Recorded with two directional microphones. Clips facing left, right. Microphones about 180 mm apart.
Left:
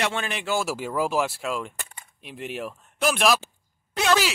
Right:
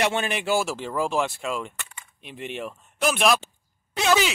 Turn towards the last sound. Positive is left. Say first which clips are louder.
# right 1 dB
turn(degrees=0)  # may be behind; listen again after turning